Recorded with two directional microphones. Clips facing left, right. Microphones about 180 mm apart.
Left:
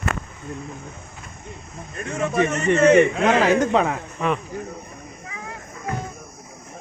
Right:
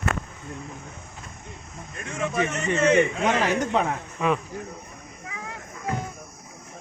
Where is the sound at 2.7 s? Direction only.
70° left (ahead or behind); by 4.0 s 90° left.